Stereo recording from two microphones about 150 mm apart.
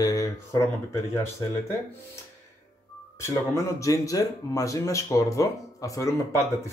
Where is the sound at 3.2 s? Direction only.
20° left (ahead or behind).